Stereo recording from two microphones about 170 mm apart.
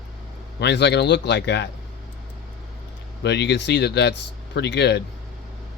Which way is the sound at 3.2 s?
90° left.